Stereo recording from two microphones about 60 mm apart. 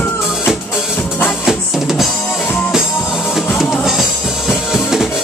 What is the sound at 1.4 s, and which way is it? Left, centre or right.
Music, centre.